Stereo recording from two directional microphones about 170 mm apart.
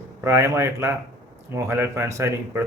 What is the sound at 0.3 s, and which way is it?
Speech, 15° right (ahead or behind).